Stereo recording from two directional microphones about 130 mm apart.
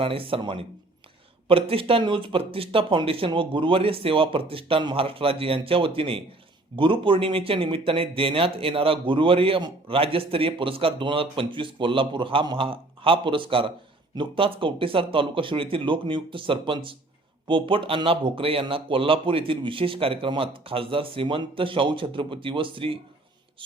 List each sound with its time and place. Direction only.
0.0 s speech: 45° right (ahead or behind)